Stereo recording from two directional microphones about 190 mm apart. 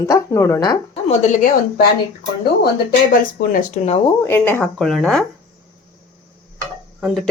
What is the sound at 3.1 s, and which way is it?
Speech, 50° left (ahead or behind).